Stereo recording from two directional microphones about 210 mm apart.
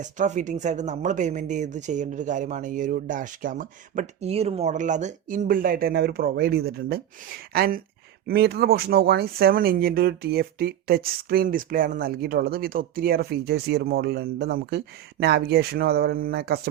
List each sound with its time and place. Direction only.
0.0 s speech: 35° right (ahead or behind)